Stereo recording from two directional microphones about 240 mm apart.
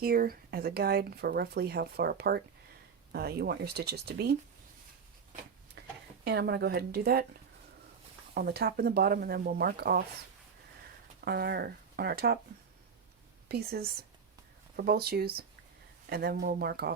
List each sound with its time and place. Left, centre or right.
0.0 s speech: right
6.2 s a woman's voice: right
8.4 s speech: right
11.3 s speech: right
13.5 s speech: right